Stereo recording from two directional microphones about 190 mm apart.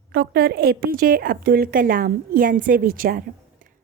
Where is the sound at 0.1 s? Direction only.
55° right (ahead or behind).